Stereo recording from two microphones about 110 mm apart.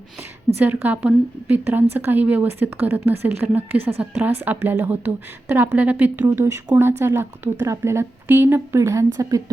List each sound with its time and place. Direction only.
0.6 s a woman's voice: 15° right (ahead or behind)
6.2 s a woman's voice: 25° right (ahead or behind)